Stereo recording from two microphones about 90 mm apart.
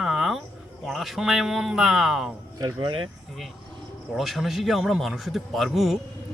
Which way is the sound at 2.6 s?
45° right (ahead or behind).